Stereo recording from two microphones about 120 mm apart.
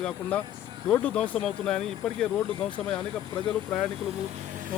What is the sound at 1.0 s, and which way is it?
Speech, 10° left (ahead or behind).